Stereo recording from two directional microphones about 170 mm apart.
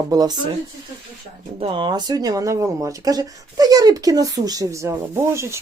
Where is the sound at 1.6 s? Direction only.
30° right (ahead or behind).